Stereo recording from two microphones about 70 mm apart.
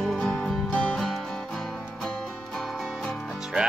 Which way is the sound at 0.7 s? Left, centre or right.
Left.